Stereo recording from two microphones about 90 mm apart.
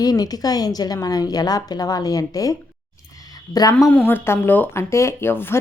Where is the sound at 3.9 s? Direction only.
20° left (ahead or behind).